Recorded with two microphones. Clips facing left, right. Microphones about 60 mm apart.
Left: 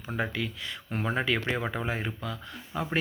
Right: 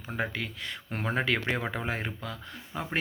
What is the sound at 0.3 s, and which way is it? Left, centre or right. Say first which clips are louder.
Speech: left 2 dB; right.